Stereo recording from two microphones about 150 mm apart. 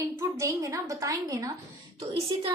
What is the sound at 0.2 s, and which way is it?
A woman's voice, 20° right (ahead or behind).